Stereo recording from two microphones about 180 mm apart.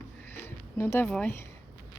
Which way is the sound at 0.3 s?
10° left (ahead or behind).